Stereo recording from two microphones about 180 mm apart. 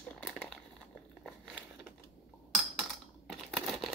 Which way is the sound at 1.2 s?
Centre (ahead or behind).